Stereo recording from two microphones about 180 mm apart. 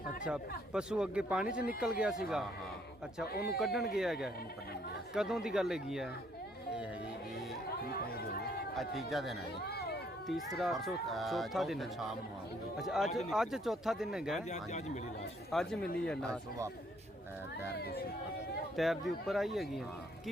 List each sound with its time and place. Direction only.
0.3 s speech: 5° right (ahead or behind)
3.3 s speech: 60° left (ahead or behind)
3.6 s speech: centre (ahead or behind)
7.9 s chatter: 60° left (ahead or behind)
8.7 s speech: centre (ahead or behind)
9.6 s a sound: 65° left (ahead or behind)
10.2 s speech: centre (ahead or behind)
14.5 s speech: 40° left (ahead or behind)
15.5 s speech: 5° left (ahead or behind)
17.7 s speech: 60° left (ahead or behind)
18.8 s speech: centre (ahead or behind)